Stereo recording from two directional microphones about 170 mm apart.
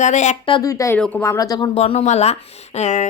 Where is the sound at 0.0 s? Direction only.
45° left (ahead or behind).